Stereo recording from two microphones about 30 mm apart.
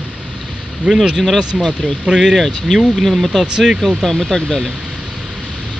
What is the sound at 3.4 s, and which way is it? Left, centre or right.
Speech, right.